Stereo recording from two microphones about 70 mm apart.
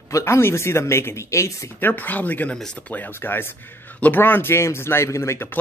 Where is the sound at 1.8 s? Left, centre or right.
Left.